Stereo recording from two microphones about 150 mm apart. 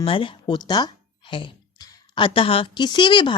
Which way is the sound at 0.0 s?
35° left (ahead or behind).